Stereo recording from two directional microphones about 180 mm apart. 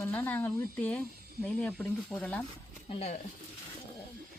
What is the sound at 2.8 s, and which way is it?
Speech, 35° left (ahead or behind).